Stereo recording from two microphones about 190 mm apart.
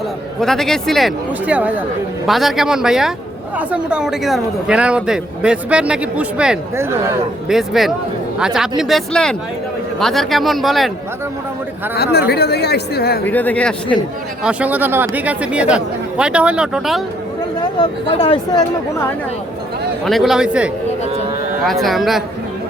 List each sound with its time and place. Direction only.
0.3 s a man's voice: centre (ahead or behind)
11.9 s speech: 60° left (ahead or behind)
13.2 s speech: 10° left (ahead or behind)
14.4 s speech: 10° right (ahead or behind)
17.7 s speech: 25° left (ahead or behind)
20.1 s a man's voice: centre (ahead or behind)